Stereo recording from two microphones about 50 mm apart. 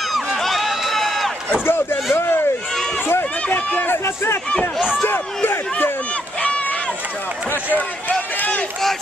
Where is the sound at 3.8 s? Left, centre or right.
Left.